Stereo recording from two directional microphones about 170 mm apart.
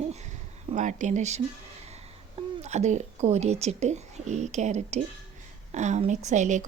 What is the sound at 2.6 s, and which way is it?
A woman's voice, 40° right (ahead or behind).